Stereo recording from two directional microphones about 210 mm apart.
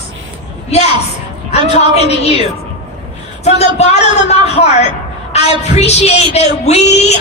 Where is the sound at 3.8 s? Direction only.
30° left (ahead or behind).